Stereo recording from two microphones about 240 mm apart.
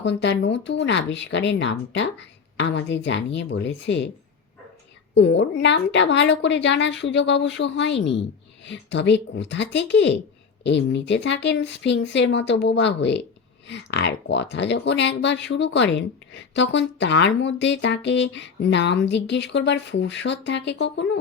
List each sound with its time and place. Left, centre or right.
0.0 s speech: left
5.1 s speech: left